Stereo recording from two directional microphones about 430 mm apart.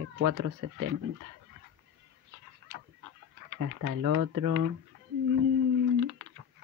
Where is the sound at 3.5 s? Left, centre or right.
Right.